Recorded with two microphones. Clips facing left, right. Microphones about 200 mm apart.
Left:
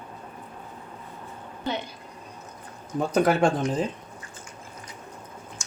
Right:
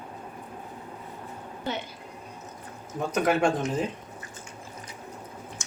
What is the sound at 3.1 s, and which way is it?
Speech, 30° left (ahead or behind).